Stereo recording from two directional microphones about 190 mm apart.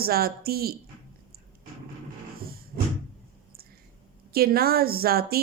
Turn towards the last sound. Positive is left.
turn(degrees=-55)  # may be behind; listen again after turning